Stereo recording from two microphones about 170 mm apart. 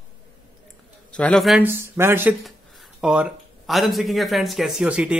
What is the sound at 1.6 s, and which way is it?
Speech, 15° right (ahead or behind).